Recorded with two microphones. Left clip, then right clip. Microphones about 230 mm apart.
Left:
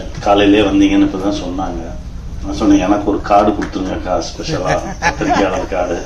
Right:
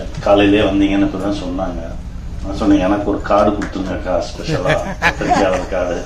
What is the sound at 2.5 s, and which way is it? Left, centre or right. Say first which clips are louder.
A man's voice: left 2 dB; left.